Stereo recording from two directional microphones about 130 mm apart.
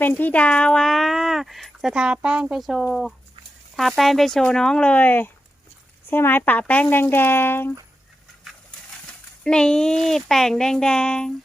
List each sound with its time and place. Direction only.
0.0 s speech: 15° left (ahead or behind)
9.4 s speech: 5° left (ahead or behind)